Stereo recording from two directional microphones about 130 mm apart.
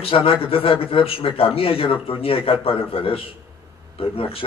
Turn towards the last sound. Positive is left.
turn(degrees=45)  # may be behind; listen again after turning